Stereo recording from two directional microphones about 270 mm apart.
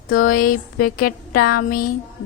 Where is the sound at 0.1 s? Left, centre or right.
Left.